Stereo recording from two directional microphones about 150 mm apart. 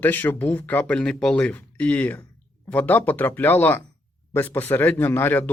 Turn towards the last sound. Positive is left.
turn(degrees=15)  # may be behind; listen again after turning